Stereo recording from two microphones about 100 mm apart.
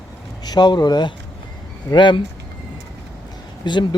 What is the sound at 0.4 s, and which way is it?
Speech, 45° left (ahead or behind).